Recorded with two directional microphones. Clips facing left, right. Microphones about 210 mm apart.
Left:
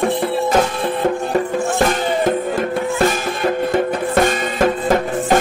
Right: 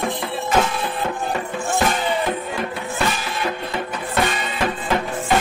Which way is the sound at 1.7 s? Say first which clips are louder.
Left 1 dB; 50° left (ahead or behind).